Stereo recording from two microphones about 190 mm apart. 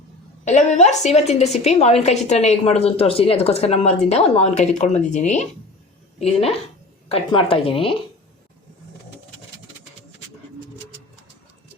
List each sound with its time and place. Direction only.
0.4 s a woman's voice: 40° left (ahead or behind)